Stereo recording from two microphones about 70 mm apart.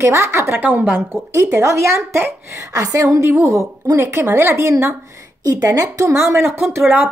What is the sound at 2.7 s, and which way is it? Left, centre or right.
A woman's voice, right.